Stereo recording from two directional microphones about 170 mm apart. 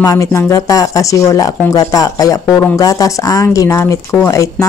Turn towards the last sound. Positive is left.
turn(degrees=20)  # may be behind; listen again after turning